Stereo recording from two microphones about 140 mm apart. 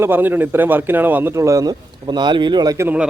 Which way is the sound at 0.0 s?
15° right (ahead or behind).